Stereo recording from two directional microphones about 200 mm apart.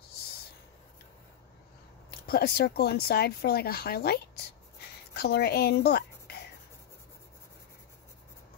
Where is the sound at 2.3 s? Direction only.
50° left (ahead or behind).